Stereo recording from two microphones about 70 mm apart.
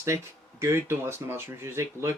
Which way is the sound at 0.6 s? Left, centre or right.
Right.